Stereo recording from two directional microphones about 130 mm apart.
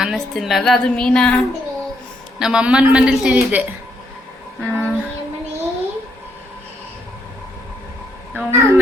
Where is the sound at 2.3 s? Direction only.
5° right (ahead or behind).